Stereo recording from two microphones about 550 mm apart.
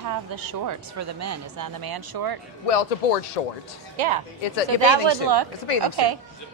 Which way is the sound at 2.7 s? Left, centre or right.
Left.